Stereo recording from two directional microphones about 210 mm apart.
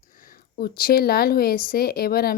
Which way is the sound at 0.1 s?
40° left (ahead or behind).